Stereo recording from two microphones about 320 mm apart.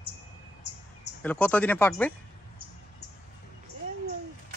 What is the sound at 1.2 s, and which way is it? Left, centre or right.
Speech, centre.